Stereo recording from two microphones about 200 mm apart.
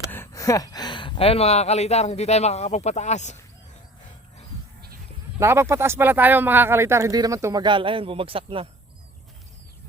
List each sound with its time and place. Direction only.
0.1 s speech: 15° left (ahead or behind); by 3.3 s 35° left (ahead or behind)
5.4 s speech: 15° right (ahead or behind)